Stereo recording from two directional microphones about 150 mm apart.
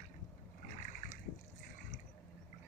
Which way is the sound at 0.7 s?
55° left (ahead or behind).